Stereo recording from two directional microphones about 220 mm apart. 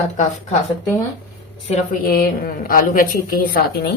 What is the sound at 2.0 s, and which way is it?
A woman's voice, 45° left (ahead or behind).